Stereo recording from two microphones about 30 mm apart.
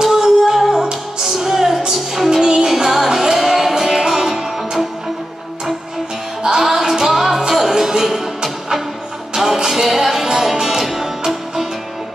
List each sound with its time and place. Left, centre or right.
0.0 s music: centre
2.4 s music: right
6.6 s music: centre
9.3 s music: centre